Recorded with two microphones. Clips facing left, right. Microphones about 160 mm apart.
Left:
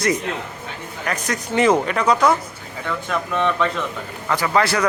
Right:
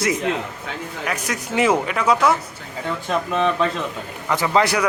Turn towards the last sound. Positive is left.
turn(degrees=-15)  # may be behind; listen again after turning